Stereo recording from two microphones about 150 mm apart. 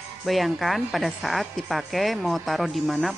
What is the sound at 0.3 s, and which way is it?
A woman's voice, centre (ahead or behind).